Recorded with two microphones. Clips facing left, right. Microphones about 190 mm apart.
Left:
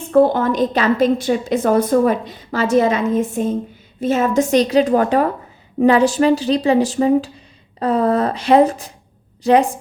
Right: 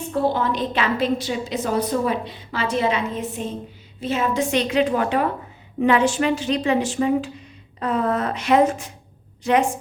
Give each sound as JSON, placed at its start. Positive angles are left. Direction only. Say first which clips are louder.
{"t": 0.1, "sound": "a woman's voice", "louder": "left 8 dB", "side_deg": 50}